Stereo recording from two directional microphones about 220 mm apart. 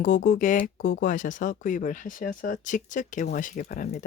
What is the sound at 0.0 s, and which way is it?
Speech, 40° left (ahead or behind).